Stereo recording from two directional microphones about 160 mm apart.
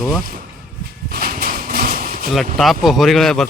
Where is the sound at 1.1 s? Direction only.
65° right (ahead or behind).